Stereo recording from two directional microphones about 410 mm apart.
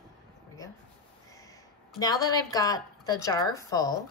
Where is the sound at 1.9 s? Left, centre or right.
Centre.